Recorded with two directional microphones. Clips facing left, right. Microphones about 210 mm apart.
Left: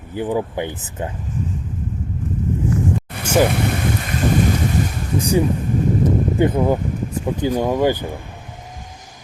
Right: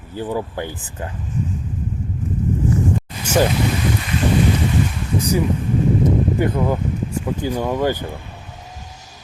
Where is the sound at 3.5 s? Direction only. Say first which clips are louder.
Right 1 dB; 60° left (ahead or behind).